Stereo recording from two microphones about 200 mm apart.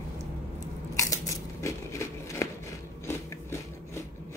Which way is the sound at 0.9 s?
15° left (ahead or behind).